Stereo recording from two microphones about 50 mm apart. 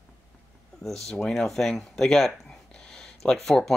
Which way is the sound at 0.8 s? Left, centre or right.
Centre.